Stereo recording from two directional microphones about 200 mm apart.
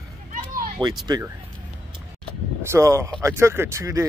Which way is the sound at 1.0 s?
20° right (ahead or behind).